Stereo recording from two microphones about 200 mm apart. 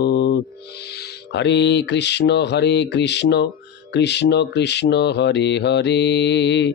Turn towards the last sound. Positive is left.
turn(degrees=60)  # may be behind; listen again after turning